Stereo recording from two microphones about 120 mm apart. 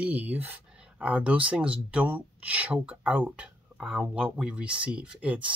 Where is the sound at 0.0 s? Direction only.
15° right (ahead or behind).